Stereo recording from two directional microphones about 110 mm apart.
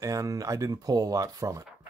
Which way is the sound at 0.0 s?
30° right (ahead or behind).